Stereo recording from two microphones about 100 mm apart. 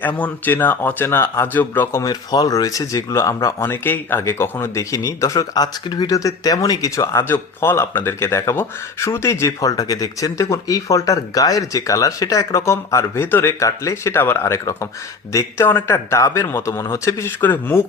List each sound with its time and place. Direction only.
0.2 s speech: 20° left (ahead or behind)
2.0 s speech: 40° left (ahead or behind)
3.7 s speech: 20° left (ahead or behind)